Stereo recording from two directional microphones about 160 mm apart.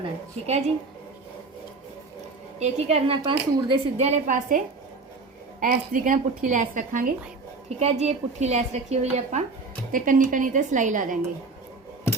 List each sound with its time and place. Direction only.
0.0 s a woman's voice: 40° right (ahead or behind)
2.6 s a woman's voice: 45° right (ahead or behind)
7.8 s a woman's voice: 45° right (ahead or behind)
9.9 s a woman's voice: 55° right (ahead or behind)